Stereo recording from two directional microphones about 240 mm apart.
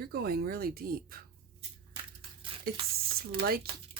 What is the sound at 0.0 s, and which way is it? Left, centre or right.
Speech, right.